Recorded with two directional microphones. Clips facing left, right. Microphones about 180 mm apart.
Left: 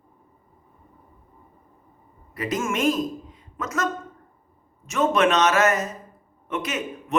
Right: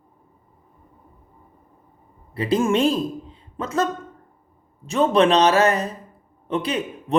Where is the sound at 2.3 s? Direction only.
30° right (ahead or behind).